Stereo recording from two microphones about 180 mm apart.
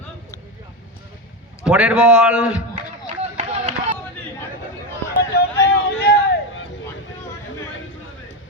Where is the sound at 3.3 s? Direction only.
35° right (ahead or behind).